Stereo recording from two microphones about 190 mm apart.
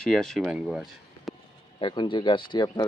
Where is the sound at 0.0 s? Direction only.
5° left (ahead or behind).